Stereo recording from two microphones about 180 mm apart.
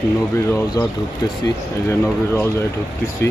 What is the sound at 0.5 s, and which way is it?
Speech, 20° left (ahead or behind).